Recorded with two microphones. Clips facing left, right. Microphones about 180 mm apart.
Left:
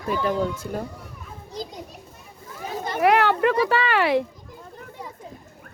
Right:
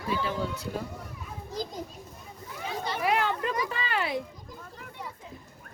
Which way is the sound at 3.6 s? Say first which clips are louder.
Left 10 dB; 75° left (ahead or behind).